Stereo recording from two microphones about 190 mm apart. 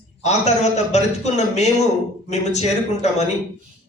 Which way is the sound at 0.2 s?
35° left (ahead or behind).